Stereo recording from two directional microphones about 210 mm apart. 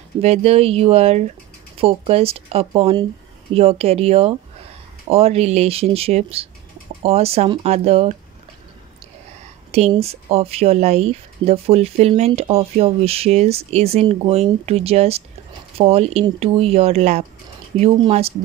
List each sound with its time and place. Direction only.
0.2 s speech: 30° right (ahead or behind)
9.7 s speech: 30° right (ahead or behind)